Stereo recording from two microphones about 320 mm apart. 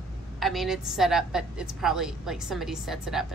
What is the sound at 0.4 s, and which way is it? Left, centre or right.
A woman's voice, centre.